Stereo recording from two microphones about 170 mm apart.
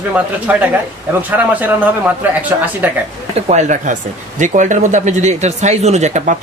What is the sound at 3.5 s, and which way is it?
Speech, 45° right (ahead or behind).